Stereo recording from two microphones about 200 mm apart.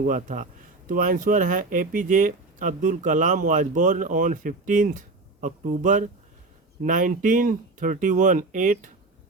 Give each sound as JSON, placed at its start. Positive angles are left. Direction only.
{"t": 0.0, "sound": "speech", "side_deg": -40}